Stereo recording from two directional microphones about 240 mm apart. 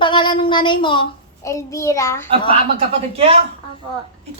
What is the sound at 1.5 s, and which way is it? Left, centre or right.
Speech, centre.